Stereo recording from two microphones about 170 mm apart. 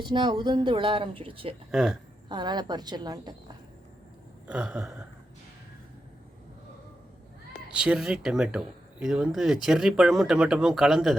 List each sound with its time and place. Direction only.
0.0 s speech: 25° right (ahead or behind)
1.7 s speech: 5° right (ahead or behind)
2.3 s speech: 25° right (ahead or behind)
4.4 s speech: 5° right (ahead or behind)
7.7 s speech: 5° right (ahead or behind)